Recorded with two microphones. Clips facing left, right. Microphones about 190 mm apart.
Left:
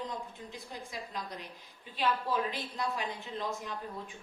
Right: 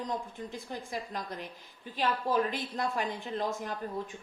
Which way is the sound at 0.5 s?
50° right (ahead or behind).